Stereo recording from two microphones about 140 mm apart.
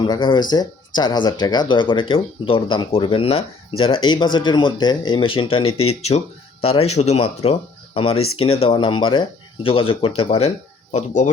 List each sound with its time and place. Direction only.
0.0 s speech: 30° left (ahead or behind); by 10.5 s 50° left (ahead or behind)
10.9 s speech: 60° left (ahead or behind)